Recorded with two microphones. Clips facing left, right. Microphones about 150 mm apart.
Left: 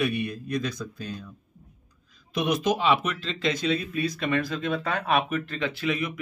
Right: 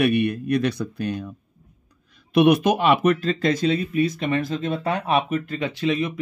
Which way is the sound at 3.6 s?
25° right (ahead or behind).